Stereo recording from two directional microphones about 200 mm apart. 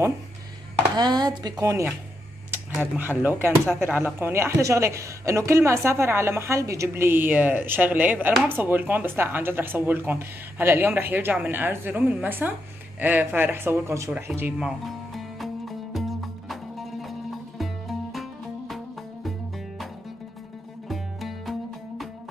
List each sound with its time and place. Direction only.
0.9 s speech: 20° right (ahead or behind)
13.0 s a sound: 10° right (ahead or behind)
17.6 s music: centre (ahead or behind)
20.9 s music: centre (ahead or behind)